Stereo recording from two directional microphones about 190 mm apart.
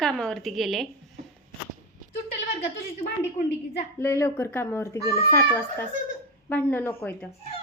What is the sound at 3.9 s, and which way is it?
A child's voice, 15° left (ahead or behind).